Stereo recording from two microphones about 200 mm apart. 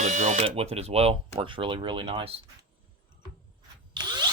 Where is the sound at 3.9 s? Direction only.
20° right (ahead or behind).